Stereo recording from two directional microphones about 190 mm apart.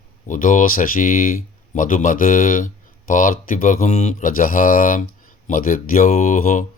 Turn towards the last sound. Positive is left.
turn(degrees=40)  # may be behind; listen again after turning